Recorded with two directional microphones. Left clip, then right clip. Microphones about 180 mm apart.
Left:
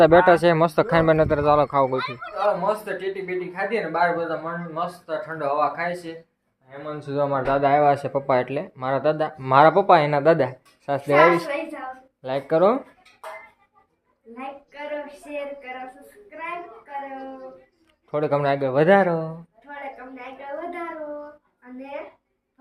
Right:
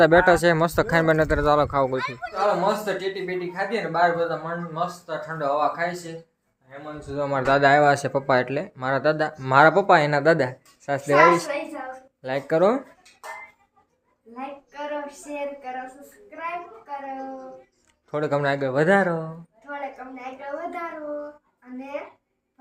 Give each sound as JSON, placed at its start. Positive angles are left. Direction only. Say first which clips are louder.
{"t": 0.0, "sound": "speech", "louder": "left 2 dB", "side_deg": 0}
{"t": 2.0, "sound": "speech", "louder": "even", "side_deg": -20}
{"t": 2.3, "sound": "speech", "louder": "even", "side_deg": -5}
{"t": 7.1, "sound": "a man's voice", "louder": "left 4 dB", "side_deg": 60}
{"t": 7.4, "sound": "speech", "louder": "right 2 dB", "side_deg": -15}
{"t": 14.3, "sound": "a sound", "louder": "right 1 dB", "side_deg": 0}
{"t": 18.1, "sound": "speech", "louder": "left 2 dB", "side_deg": 0}